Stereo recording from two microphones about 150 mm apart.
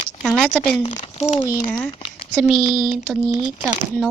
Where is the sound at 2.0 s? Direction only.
35° left (ahead or behind).